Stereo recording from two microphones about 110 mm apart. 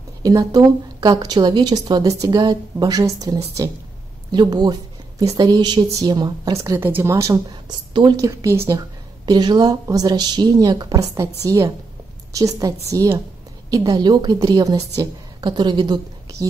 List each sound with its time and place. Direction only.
0.2 s a woman's voice: 30° right (ahead or behind)
7.6 s a woman's voice: 45° right (ahead or behind)
8.2 s a woman's voice: 30° right (ahead or behind)
9.2 s a woman's voice: 40° right (ahead or behind)